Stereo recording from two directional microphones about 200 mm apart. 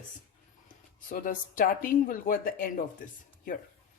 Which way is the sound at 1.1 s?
45° left (ahead or behind).